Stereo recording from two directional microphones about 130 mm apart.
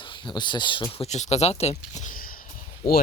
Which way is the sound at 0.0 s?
40° left (ahead or behind).